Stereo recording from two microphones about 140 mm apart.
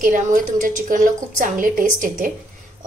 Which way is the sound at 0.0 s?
65° right (ahead or behind).